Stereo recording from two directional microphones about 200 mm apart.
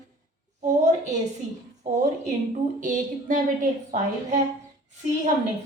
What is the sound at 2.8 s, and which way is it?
A woman's voice, 40° right (ahead or behind).